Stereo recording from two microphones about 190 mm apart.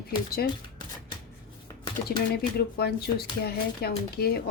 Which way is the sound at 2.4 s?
55° left (ahead or behind).